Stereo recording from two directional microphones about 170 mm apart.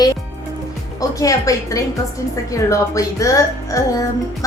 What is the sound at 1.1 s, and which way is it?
A woman's voice, 20° left (ahead or behind).